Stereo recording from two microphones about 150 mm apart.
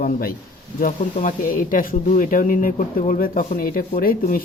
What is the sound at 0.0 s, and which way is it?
Speech, 85° left.